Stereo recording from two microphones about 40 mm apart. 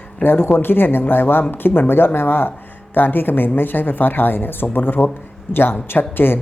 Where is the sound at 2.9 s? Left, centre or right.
Left.